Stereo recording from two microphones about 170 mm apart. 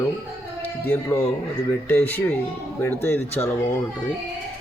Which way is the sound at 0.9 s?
15° left (ahead or behind).